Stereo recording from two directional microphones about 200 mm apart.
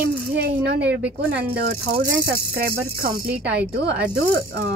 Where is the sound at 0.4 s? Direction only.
55° right (ahead or behind).